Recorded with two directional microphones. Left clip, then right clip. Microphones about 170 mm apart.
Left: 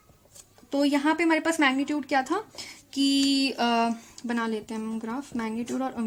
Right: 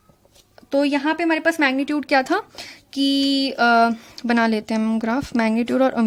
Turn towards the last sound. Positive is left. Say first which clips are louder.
# right 12 dB
turn(degrees=-60)  # may be behind; listen again after turning